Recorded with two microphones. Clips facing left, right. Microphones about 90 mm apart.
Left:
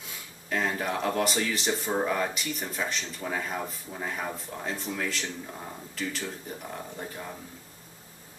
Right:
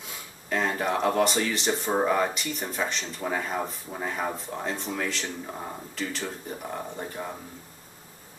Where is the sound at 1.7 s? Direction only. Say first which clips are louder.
Right 4 dB; 30° right (ahead or behind).